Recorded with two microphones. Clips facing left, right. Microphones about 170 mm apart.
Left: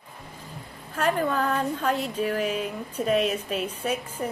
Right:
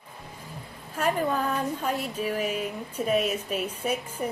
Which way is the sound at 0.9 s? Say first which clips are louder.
Left 1 dB; 10° right (ahead or behind).